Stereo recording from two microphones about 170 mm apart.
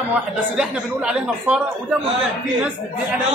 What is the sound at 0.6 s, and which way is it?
Speech, 5° right (ahead or behind).